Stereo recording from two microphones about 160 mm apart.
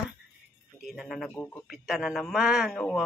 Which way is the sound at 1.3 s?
10° left (ahead or behind).